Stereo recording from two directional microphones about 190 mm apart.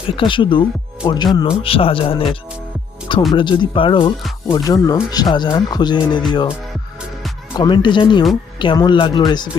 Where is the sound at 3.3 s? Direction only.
25° left (ahead or behind).